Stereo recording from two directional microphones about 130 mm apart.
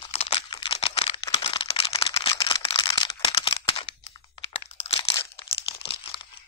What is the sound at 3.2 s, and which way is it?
Single-lens reflex camera, 45° left (ahead or behind).